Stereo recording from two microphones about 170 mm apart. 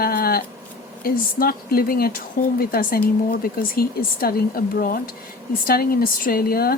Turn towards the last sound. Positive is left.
turn(degrees=60)  # may be behind; listen again after turning